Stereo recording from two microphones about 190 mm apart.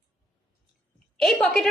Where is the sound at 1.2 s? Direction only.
Centre (ahead or behind).